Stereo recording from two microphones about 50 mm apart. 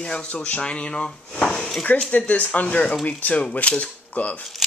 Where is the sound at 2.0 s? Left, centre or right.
Left.